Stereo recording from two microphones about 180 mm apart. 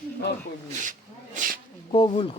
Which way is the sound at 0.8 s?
45° right (ahead or behind).